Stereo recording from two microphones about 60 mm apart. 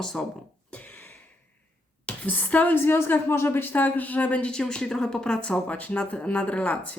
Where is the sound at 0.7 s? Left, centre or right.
Left.